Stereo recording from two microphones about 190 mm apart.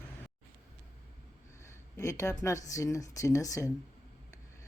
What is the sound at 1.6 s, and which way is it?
Speech, 15° left (ahead or behind).